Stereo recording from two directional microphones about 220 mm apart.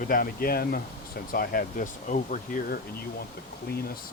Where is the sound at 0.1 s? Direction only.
40° left (ahead or behind).